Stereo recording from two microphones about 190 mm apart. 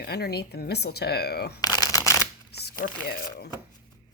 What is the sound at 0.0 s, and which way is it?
Speech, 55° left (ahead or behind).